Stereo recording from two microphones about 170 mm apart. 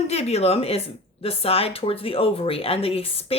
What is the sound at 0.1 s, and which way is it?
Speech, 40° left (ahead or behind).